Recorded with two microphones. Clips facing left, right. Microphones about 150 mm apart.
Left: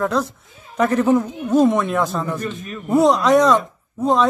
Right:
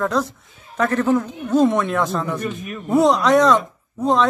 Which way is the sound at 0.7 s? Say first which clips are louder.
Left 2 dB; 15° left (ahead or behind).